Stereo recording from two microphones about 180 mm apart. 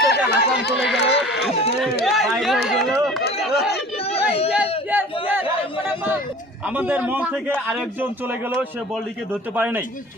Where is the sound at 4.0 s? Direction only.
35° left (ahead or behind).